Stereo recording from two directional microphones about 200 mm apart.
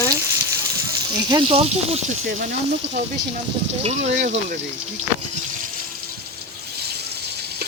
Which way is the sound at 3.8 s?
35° right (ahead or behind).